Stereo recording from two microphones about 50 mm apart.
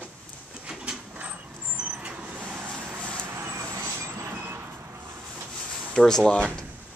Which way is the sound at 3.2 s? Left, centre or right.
Right.